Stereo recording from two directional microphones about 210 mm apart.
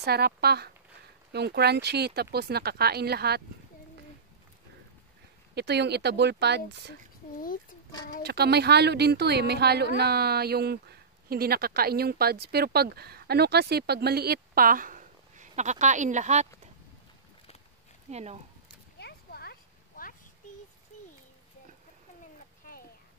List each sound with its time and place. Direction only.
0.0 s speech: 50° right (ahead or behind)
5.5 s speech: 50° right (ahead or behind)
8.3 s speech: 50° right (ahead or behind); by 16.4 s 35° right (ahead or behind)
18.1 s speech: 30° right (ahead or behind)
18.9 s a sound: 50° left (ahead or behind)